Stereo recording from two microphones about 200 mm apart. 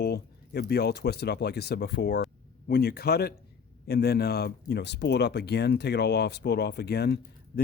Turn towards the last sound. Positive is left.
turn(degrees=55)  # may be behind; listen again after turning